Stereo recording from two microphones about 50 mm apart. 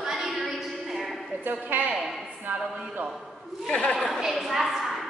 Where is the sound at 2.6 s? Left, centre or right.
Centre.